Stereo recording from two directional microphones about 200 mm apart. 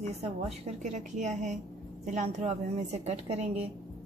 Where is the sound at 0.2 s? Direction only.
35° right (ahead or behind).